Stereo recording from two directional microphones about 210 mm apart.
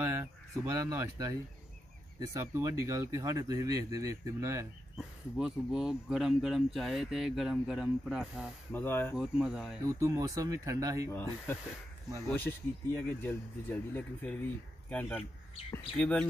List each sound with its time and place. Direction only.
0.0 s speech: 15° right (ahead or behind)
4.9 s speech: centre (ahead or behind)
8.7 s speech: 10° left (ahead or behind)
9.1 s speech: 5° right (ahead or behind)
9.8 s speech: 15° right (ahead or behind)
11.1 s speech: 10° left (ahead or behind)
13.2 s speech: 10° left (ahead or behind)